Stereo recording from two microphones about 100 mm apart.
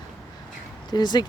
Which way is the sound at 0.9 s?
45° left (ahead or behind).